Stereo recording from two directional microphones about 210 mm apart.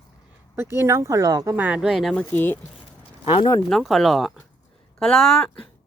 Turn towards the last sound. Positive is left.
turn(degrees=0)  # may be behind; listen again after turning